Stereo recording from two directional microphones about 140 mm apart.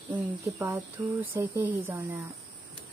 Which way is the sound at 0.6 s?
15° right (ahead or behind).